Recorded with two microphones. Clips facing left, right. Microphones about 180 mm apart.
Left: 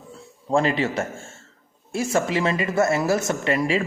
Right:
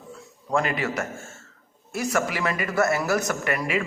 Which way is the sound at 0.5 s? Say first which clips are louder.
Left 4 dB; 30° left (ahead or behind).